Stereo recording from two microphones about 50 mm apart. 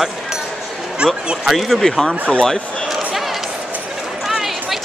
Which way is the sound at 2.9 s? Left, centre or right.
Centre.